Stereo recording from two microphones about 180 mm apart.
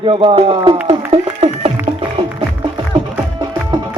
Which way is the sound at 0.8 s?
35° right (ahead or behind).